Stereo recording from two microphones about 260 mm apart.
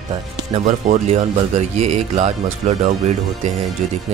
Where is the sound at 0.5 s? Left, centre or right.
Right.